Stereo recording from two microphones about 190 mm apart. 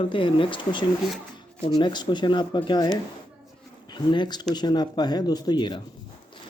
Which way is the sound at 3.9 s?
25° left (ahead or behind).